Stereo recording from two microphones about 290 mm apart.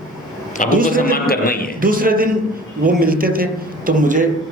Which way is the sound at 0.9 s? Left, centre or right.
Left.